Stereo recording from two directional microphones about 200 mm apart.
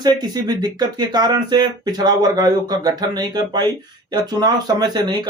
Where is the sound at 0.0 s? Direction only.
20° right (ahead or behind).